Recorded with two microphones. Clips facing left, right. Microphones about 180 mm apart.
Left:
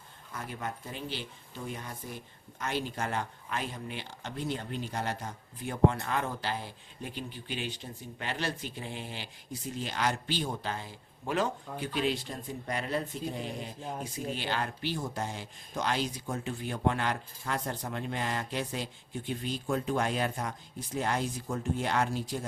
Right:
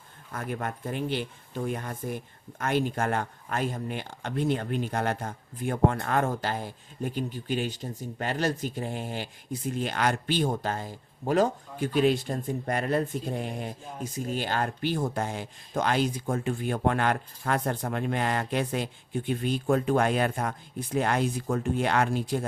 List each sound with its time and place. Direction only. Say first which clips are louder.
0.3 s speech: right 5 dB; 55° right (ahead or behind)